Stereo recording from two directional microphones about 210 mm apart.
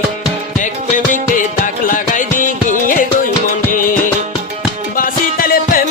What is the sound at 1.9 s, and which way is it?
Music, 40° left (ahead or behind).